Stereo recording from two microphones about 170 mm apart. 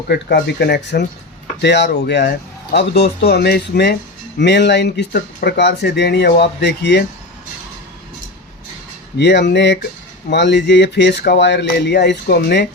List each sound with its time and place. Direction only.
0.1 s speech: 75° left (ahead or behind)
4.4 s speech: 90° left
9.1 s speech: 90° left